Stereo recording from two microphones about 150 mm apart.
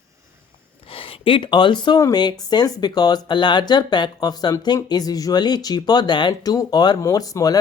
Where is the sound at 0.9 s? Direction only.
35° left (ahead or behind).